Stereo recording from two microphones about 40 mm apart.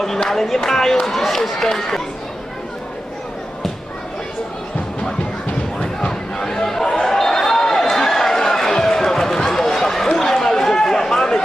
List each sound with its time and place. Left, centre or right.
0.3 s speech: centre
5.8 s crowd: centre
6.8 s a sound: centre